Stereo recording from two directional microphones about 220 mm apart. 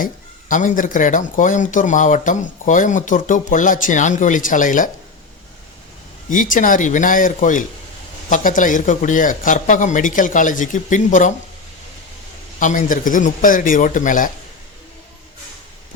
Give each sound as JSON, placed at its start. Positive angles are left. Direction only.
{"t": 0.0, "sound": "speech", "side_deg": 35}
{"t": 6.2, "sound": "speech", "side_deg": 35}
{"t": 12.5, "sound": "speech", "side_deg": 35}